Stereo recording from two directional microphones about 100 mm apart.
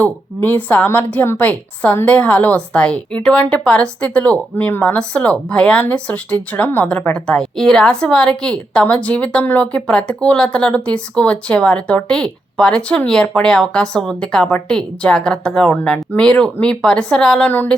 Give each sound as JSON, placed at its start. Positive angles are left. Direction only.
{"t": 0.0, "sound": "a woman's voice", "side_deg": 20}
{"t": 17.5, "sound": "a woman's voice", "side_deg": 15}